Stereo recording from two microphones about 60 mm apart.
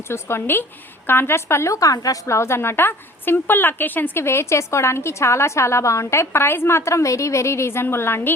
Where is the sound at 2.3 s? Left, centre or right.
Left.